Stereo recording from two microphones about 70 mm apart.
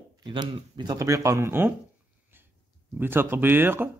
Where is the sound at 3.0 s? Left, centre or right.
Right.